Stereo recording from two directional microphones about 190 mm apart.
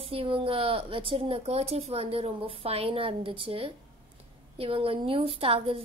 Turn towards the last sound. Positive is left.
turn(degrees=-30)  # may be behind; listen again after turning